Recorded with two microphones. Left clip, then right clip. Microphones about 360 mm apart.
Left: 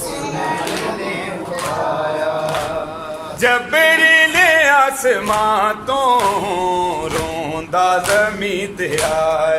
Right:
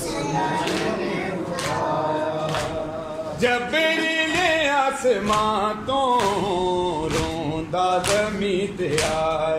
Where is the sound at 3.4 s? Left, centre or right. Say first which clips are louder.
Left 8 dB; left.